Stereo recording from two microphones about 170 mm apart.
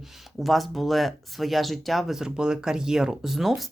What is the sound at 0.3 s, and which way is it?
Speech, centre (ahead or behind).